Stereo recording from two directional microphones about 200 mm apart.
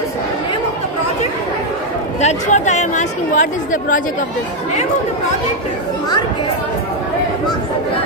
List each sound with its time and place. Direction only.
2.2 s speech: 35° left (ahead or behind)